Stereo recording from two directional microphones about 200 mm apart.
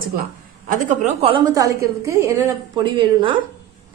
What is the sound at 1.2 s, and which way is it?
A woman's voice, 20° right (ahead or behind).